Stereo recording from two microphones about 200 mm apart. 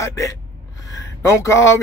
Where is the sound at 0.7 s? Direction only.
15° left (ahead or behind).